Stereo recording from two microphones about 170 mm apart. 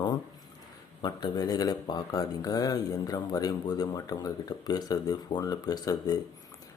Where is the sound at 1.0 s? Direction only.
25° left (ahead or behind).